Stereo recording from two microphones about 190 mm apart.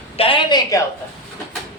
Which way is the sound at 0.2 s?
25° left (ahead or behind).